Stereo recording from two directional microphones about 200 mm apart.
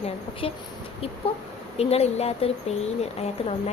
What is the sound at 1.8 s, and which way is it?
Speech, 30° left (ahead or behind).